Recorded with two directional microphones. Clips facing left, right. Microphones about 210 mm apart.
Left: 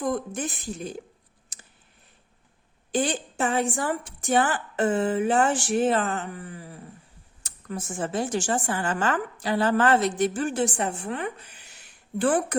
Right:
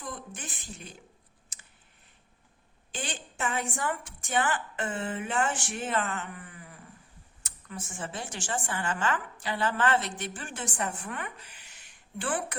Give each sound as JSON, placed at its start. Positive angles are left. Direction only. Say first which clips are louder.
{"t": 0.0, "sound": "a woman's voice", "louder": "left 13 dB", "side_deg": 40}
{"t": 1.5, "sound": "clicking", "louder": "left 6 dB", "side_deg": 35}
{"t": 2.9, "sound": "a woman's voice", "louder": "left 13 dB", "side_deg": 40}
{"t": 12.2, "sound": "a woman's voice", "louder": "left 10 dB", "side_deg": 40}